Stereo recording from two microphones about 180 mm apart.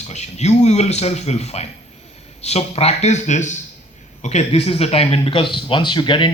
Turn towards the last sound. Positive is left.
turn(degrees=25)  # may be behind; listen again after turning